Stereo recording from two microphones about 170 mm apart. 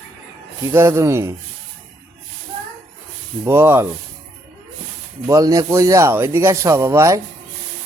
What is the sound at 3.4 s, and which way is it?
Speech, 15° right (ahead or behind).